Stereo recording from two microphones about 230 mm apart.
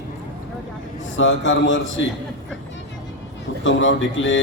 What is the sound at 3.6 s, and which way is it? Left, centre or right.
Speech, left.